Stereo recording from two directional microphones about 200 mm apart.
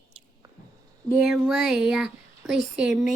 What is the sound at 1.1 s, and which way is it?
A child's voice, centre (ahead or behind).